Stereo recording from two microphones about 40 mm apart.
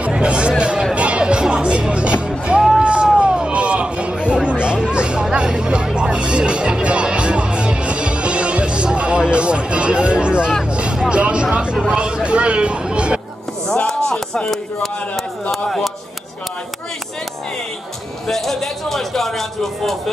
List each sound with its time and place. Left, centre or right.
0.0 s speech: right
0.9 s music: right
2.2 s speech: right
2.8 s a sound: right
3.2 s hubbub: right
4.6 s music: right
10.7 s vehicle: right
11.1 s speech: right
14.1 s speech: left
15.5 s speech: centre
18.2 s a man's voice: centre